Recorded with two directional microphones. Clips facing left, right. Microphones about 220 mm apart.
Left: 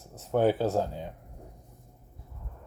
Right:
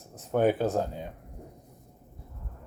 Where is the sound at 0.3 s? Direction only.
15° right (ahead or behind).